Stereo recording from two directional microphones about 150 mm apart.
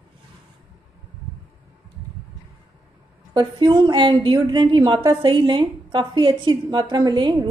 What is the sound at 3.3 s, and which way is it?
A woman's voice, 30° right (ahead or behind).